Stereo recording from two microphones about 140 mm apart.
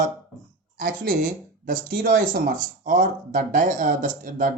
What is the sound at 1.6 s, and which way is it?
Speech, 85° right.